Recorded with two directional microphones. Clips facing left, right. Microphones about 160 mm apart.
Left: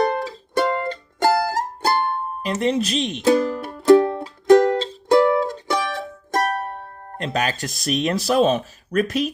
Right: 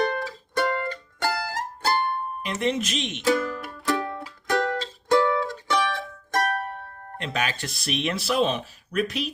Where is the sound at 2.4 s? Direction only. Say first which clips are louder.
Left 5 dB; 35° left (ahead or behind).